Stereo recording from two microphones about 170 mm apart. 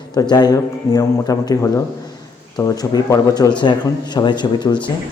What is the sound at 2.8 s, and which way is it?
A man's voice, 20° left (ahead or behind).